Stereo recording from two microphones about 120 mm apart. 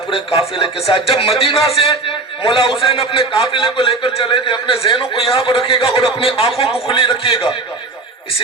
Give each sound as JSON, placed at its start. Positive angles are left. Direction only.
{"t": 0.1, "sound": "a man's voice", "side_deg": 50}